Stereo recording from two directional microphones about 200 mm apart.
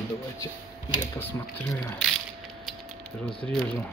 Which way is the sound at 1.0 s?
10° left (ahead or behind).